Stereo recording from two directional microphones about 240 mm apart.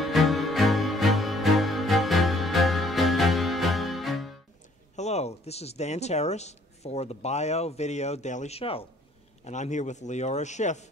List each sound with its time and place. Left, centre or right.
0.0 s music: centre
4.9 s a man's voice: left